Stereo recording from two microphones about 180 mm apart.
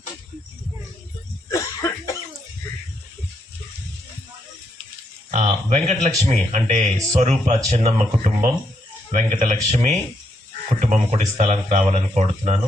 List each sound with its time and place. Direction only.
1.5 s cough: 15° left (ahead or behind)
5.3 s speech: 40° right (ahead or behind)